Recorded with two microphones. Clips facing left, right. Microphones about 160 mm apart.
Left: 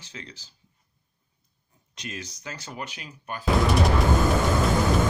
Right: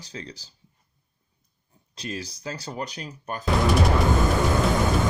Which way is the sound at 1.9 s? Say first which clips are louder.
Right 4 dB; 30° right (ahead or behind).